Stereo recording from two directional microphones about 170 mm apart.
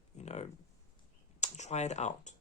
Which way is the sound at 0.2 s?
40° left (ahead or behind).